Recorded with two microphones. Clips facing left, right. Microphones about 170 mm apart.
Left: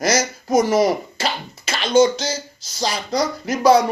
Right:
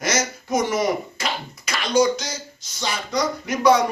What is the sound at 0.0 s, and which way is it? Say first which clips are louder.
Speech: left 4 dB; 35° left (ahead or behind).